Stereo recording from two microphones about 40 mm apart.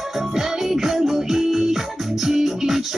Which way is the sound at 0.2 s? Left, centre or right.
Centre.